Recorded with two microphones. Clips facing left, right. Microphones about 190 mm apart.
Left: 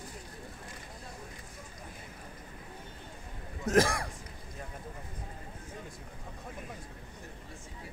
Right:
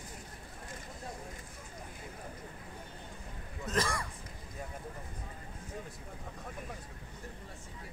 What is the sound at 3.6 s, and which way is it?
Speech, 80° left.